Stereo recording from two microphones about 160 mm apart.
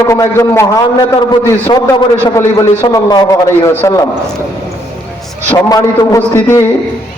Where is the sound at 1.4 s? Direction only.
30° left (ahead or behind).